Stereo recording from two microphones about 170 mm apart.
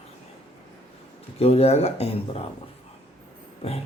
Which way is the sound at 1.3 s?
35° left (ahead or behind).